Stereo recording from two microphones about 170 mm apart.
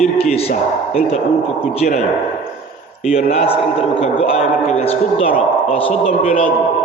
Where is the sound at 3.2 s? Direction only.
35° left (ahead or behind).